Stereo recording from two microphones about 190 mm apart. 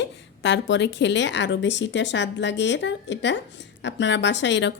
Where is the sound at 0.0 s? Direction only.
70° left (ahead or behind).